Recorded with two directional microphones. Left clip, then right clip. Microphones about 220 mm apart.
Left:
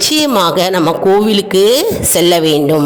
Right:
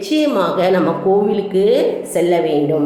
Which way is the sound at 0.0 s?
50° left (ahead or behind).